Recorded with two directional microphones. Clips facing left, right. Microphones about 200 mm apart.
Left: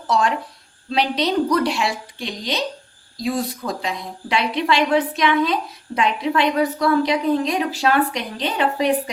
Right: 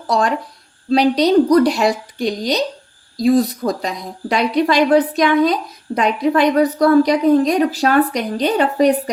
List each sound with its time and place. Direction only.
0.1 s a woman's voice: 35° right (ahead or behind)